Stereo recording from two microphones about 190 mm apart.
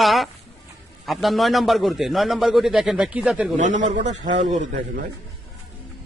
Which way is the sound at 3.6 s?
40° right (ahead or behind).